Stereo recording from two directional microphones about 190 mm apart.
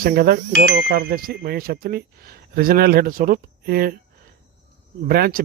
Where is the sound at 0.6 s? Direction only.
70° right (ahead or behind); by 3.9 s 50° right (ahead or behind).